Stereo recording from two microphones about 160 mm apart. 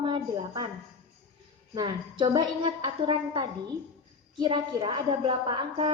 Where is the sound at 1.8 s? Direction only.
25° right (ahead or behind).